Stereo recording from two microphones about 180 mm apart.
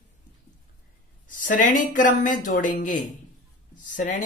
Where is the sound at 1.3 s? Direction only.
45° left (ahead or behind).